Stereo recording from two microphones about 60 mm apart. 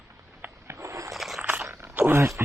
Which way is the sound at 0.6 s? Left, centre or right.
Right.